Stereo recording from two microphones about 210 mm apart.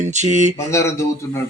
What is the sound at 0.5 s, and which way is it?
Speech, 15° left (ahead or behind).